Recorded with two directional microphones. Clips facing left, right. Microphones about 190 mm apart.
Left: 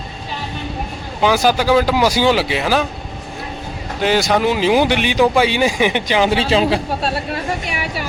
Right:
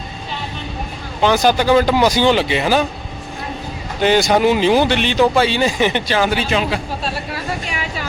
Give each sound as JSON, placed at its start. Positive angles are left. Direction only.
{"t": 1.2, "sound": "speech", "side_deg": 5}
{"t": 4.0, "sound": "speech", "side_deg": 0}
{"t": 6.3, "sound": "a man's voice", "side_deg": 30}